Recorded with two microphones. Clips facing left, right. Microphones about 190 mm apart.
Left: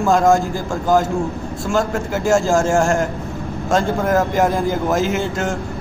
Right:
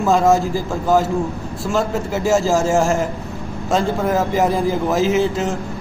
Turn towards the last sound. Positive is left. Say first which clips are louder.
# right 3 dB
turn(degrees=0)  # may be behind; listen again after turning